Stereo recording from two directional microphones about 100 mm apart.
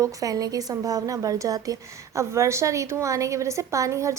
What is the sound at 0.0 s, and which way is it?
A woman's voice, 35° right (ahead or behind).